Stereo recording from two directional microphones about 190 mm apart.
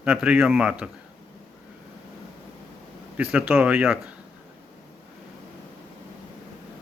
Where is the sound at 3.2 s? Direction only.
5° right (ahead or behind).